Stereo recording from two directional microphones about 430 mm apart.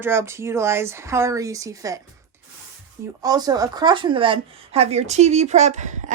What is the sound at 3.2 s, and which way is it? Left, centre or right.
A woman's voice, centre.